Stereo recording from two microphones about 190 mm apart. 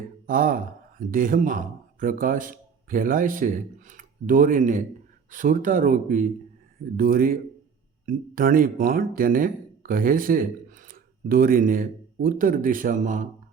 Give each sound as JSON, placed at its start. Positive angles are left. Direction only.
{"t": 0.3, "sound": "speech", "side_deg": -45}